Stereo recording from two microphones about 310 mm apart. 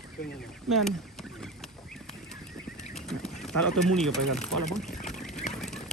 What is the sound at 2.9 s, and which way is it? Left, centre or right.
Speech, centre.